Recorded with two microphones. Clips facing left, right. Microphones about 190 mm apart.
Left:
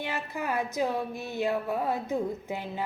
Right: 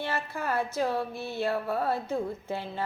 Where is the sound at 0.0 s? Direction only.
15° left (ahead or behind).